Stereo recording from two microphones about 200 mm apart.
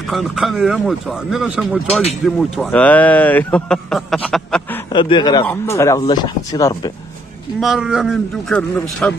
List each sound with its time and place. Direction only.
0.1 s speech: centre (ahead or behind)
4.9 s speech: 25° left (ahead or behind)
7.6 s speech: centre (ahead or behind)